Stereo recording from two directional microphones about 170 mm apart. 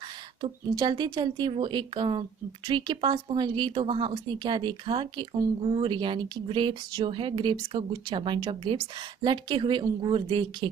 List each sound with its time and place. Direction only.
0.4 s a woman's voice: 25° right (ahead or behind)